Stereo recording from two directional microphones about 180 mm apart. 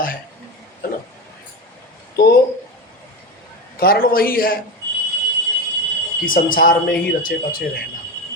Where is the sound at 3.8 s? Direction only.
55° left (ahead or behind).